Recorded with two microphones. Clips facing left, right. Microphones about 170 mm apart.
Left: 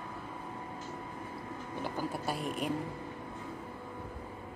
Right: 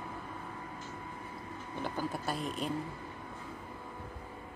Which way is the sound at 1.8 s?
10° left (ahead or behind).